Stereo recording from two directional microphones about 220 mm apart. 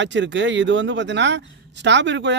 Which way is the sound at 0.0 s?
55° right (ahead or behind).